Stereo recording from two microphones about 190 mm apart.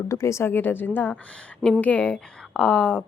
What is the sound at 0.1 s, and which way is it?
A woman's voice, 15° left (ahead or behind).